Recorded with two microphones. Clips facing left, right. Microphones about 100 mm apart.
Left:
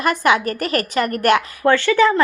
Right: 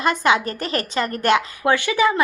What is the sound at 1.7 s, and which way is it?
Speech, 15° right (ahead or behind).